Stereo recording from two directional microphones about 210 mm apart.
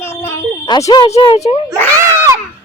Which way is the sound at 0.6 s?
20° left (ahead or behind).